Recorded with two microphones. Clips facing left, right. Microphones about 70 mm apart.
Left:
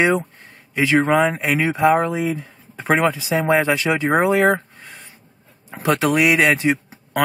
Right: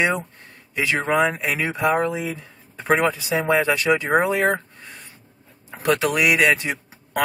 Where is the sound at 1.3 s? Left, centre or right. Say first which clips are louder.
Left 4 dB; left.